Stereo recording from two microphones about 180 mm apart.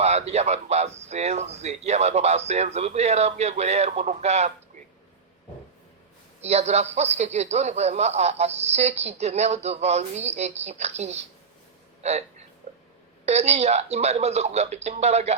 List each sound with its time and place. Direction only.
0.0 s a man's voice: 35° right (ahead or behind)
6.4 s a man's voice: 35° right (ahead or behind)
13.2 s a man's voice: 35° right (ahead or behind)